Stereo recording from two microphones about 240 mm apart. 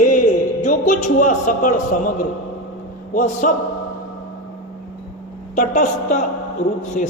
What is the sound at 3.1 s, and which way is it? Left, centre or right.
Speech, left.